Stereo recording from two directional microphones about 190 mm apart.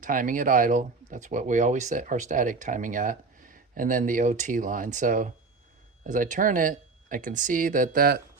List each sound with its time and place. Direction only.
0.0 s speech: 45° right (ahead or behind)